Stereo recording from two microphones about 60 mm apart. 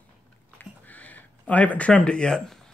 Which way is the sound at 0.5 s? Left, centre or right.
Left.